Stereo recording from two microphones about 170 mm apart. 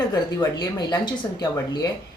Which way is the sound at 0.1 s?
25° left (ahead or behind).